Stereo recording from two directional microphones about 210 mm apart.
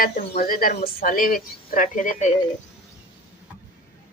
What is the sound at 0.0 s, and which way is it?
A woman's voice, 40° left (ahead or behind).